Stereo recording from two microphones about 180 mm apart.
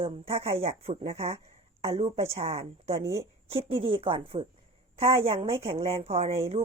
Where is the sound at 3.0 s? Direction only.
15° right (ahead or behind).